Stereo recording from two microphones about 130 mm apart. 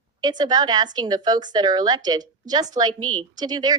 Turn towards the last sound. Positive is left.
turn(degrees=-30)  # may be behind; listen again after turning